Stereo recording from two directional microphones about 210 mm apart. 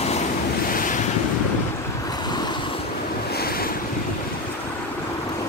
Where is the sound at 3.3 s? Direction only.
45° left (ahead or behind).